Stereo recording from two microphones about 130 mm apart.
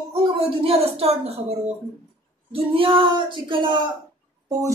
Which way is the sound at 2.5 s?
45° right (ahead or behind).